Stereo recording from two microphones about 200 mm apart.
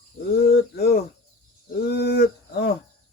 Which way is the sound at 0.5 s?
50° left (ahead or behind).